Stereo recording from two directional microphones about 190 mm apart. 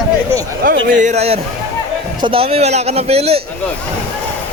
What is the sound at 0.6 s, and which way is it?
A man's voice, 45° right (ahead or behind).